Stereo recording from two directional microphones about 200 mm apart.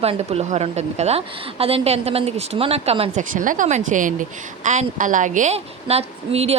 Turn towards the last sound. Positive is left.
turn(degrees=-30)  # may be behind; listen again after turning